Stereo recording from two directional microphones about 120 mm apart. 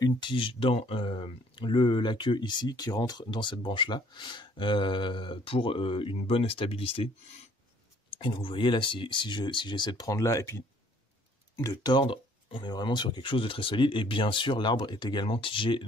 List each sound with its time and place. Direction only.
0.0 s speech: 40° left (ahead or behind)
8.1 s speech: 45° left (ahead or behind); by 10.6 s 25° left (ahead or behind)
11.8 s speech: 40° left (ahead or behind)